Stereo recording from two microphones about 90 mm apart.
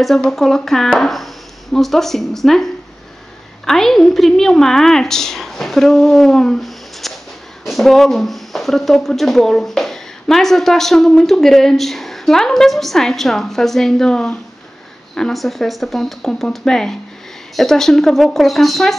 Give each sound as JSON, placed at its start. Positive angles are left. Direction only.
{"t": 0.0, "sound": "speech", "side_deg": 5}